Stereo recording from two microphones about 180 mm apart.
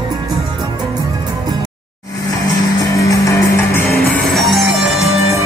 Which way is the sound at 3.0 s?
15° left (ahead or behind).